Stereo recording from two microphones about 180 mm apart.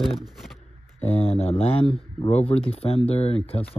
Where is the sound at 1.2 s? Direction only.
35° left (ahead or behind).